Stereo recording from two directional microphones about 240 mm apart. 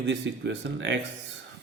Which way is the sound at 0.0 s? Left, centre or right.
Right.